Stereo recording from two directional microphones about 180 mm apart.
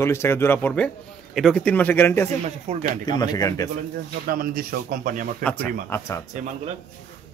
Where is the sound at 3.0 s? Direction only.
20° left (ahead or behind).